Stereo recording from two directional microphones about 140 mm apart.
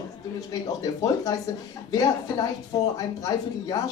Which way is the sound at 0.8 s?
25° left (ahead or behind).